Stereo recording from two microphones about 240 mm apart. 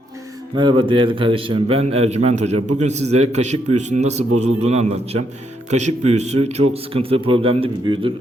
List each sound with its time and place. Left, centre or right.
0.5 s a man's voice: centre